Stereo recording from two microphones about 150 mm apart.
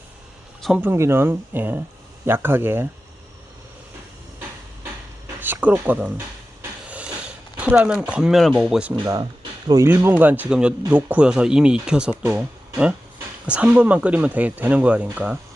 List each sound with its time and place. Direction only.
0.8 s speech: 15° right (ahead or behind)
5.4 s speech: 10° right (ahead or behind)
6.6 s a sound: 10° right (ahead or behind)
8.9 s speech: 25° right (ahead or behind)
9.8 s speech: 15° right (ahead or behind)